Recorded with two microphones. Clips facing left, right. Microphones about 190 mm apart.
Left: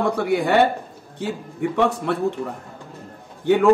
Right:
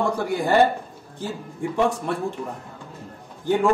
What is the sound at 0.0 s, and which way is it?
Speech, 65° left (ahead or behind).